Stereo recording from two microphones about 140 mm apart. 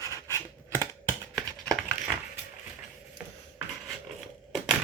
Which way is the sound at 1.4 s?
5° left (ahead or behind).